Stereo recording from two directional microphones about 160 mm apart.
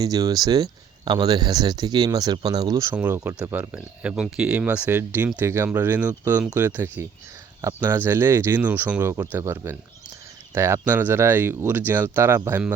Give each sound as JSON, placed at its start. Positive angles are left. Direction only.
{"t": 0.0, "sound": "speech", "side_deg": -25}